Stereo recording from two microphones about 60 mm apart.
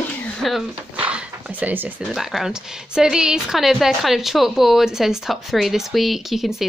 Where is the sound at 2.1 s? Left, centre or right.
Centre.